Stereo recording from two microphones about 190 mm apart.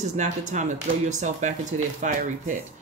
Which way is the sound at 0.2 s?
40° right (ahead or behind).